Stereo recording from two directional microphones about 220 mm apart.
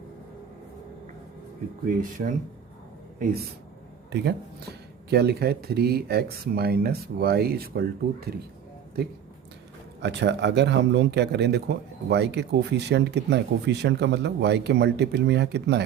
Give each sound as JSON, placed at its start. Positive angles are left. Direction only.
{"t": 1.9, "sound": "speech", "side_deg": -35}
{"t": 4.1, "sound": "speech", "side_deg": -50}
{"t": 10.0, "sound": "speech", "side_deg": -50}